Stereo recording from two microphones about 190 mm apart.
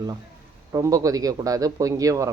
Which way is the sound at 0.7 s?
15° right (ahead or behind).